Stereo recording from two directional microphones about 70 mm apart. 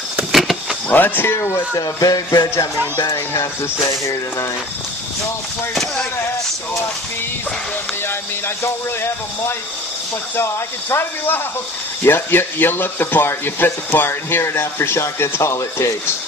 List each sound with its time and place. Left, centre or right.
0.3 s power windows: centre
0.9 s speech: left
1.8 s music: left
10.3 s speech: left